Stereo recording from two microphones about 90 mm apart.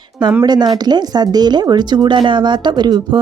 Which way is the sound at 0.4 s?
50° right (ahead or behind).